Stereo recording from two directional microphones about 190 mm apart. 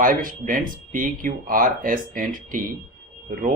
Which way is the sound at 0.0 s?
45° right (ahead or behind).